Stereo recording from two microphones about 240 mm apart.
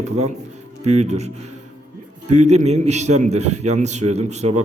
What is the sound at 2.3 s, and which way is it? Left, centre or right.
A man's voice, right.